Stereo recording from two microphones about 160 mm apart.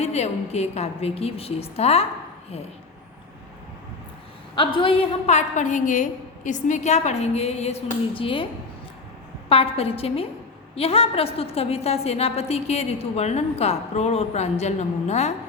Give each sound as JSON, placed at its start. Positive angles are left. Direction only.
{"t": 0.0, "sound": "a woman's voice", "side_deg": 45}
{"t": 4.5, "sound": "a woman's voice", "side_deg": 30}
{"t": 9.5, "sound": "a woman's voice", "side_deg": 40}